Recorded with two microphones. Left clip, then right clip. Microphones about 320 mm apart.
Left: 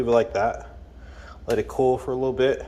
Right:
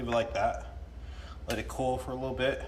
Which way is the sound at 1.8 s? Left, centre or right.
Centre.